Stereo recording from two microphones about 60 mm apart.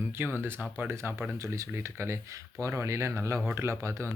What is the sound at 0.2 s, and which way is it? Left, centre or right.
Speech, right.